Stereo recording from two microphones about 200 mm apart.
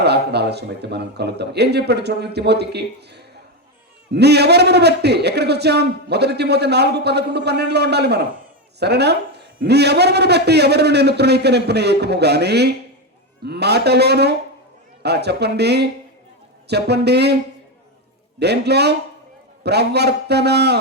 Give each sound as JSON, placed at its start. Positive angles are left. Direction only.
{"t": 0.0, "sound": "a man's voice", "side_deg": -55}